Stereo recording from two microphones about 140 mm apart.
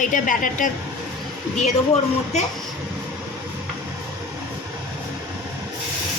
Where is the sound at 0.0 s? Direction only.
70° left (ahead or behind).